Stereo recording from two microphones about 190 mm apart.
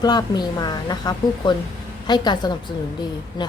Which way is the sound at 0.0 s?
20° left (ahead or behind).